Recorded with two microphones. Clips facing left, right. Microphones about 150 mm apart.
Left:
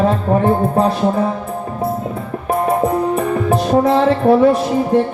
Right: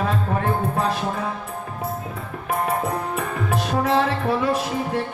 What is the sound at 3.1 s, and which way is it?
Music, 35° left (ahead or behind).